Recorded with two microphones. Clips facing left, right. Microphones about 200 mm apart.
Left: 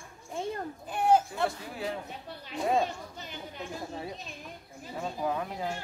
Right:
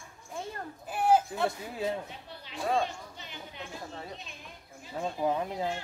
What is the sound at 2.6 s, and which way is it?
Speech, 20° left (ahead or behind).